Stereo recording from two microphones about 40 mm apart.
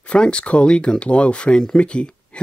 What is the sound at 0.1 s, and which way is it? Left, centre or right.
Speech, left.